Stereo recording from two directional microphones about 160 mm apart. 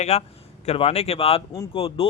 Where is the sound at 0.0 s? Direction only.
40° left (ahead or behind).